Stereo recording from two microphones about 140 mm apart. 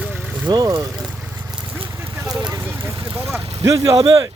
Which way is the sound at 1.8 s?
20° right (ahead or behind).